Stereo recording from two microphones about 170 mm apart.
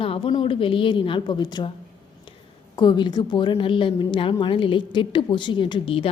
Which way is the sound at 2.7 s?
25° left (ahead or behind).